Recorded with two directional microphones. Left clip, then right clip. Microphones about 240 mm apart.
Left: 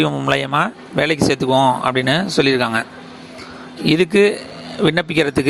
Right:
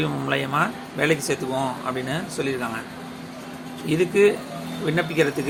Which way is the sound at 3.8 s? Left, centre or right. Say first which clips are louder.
Left 5 dB; left.